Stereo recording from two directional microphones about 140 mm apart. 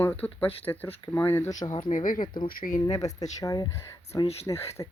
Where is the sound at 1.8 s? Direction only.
75° left (ahead or behind).